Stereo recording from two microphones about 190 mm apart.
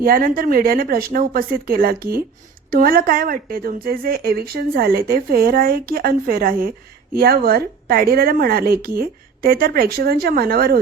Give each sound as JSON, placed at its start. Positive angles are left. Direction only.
{"t": 0.0, "sound": "a woman's voice", "side_deg": -50}